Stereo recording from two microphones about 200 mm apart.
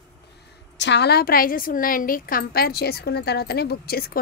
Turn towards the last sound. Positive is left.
turn(degrees=50)  # may be behind; listen again after turning